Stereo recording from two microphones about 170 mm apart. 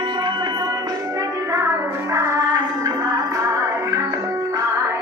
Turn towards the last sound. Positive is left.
turn(degrees=-20)  # may be behind; listen again after turning